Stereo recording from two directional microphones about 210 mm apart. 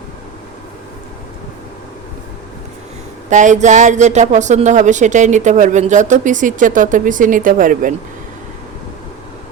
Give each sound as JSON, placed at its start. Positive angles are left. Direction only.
{"t": 3.2, "sound": "speech", "side_deg": -35}